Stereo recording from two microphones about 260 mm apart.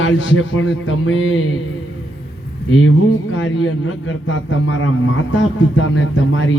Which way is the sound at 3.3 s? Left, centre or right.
Left.